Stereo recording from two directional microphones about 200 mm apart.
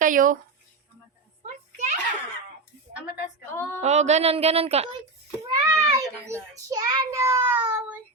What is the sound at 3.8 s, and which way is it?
Speech, 35° right (ahead or behind).